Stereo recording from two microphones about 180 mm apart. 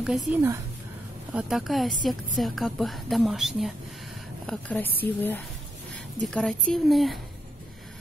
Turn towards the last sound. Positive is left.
turn(degrees=0)  # may be behind; listen again after turning